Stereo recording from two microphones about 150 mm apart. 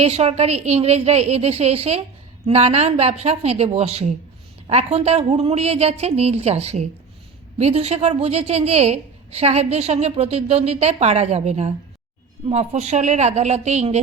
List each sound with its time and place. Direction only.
0.0 s a woman's voice: 45° right (ahead or behind)